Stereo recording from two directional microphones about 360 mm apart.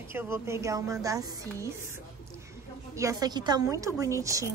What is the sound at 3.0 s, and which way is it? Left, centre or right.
A woman's voice, centre.